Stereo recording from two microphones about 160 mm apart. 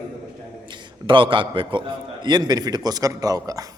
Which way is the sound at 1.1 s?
30° right (ahead or behind).